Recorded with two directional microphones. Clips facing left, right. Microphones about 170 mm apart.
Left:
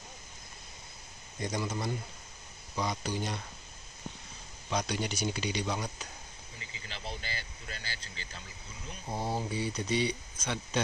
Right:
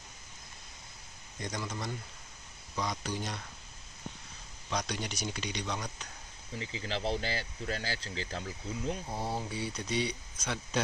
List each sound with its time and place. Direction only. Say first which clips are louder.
1.4 s speech: left 4 dB; 10° left (ahead or behind)
4.6 s speech: left 3 dB; 5° left (ahead or behind)
6.6 s speech: right 9 dB; 90° right
9.0 s speech: left 2 dB; centre (ahead or behind)